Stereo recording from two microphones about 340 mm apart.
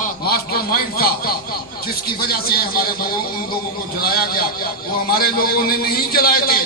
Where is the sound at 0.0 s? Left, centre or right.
Left.